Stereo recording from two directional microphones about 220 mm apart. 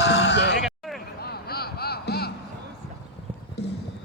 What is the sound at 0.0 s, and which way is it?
Sheep, 50° left (ahead or behind).